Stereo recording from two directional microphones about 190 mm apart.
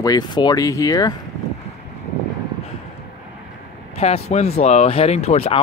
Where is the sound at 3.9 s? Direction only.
30° left (ahead or behind).